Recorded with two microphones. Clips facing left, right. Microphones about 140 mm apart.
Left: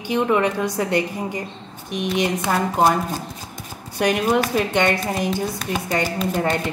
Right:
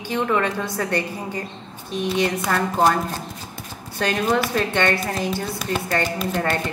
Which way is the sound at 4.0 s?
15° left (ahead or behind).